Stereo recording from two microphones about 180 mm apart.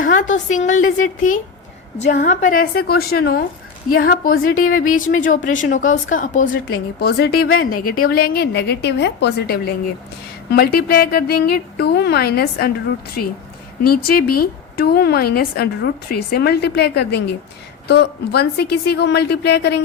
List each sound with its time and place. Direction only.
0.0 s a sound: 45° left (ahead or behind)
0.9 s a woman's voice: 45° left (ahead or behind)
7.0 s a woman's voice: 60° left (ahead or behind)
10.5 s a woman's voice: 60° left (ahead or behind)
13.8 s a woman's voice: 55° left (ahead or behind)